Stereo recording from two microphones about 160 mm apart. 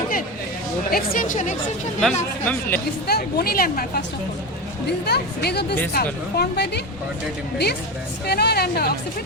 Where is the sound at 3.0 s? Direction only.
80° left.